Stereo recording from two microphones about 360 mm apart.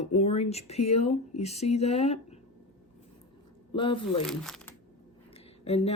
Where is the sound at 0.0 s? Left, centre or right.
Centre.